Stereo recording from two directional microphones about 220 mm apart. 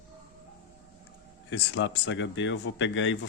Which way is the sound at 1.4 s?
55° left (ahead or behind).